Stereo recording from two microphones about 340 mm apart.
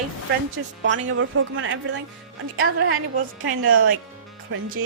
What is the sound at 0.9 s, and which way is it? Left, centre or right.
Speech, right.